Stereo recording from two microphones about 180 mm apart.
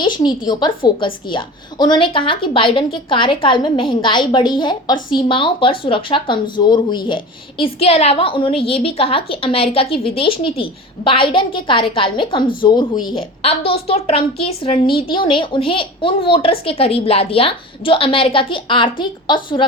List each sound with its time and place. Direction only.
0.0 s a woman's voice: 25° left (ahead or behind)